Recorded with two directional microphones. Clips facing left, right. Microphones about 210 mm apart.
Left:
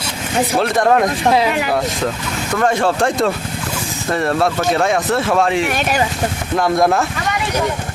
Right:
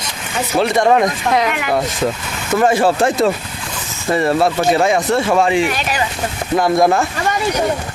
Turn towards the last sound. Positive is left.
turn(degrees=0)  # may be behind; listen again after turning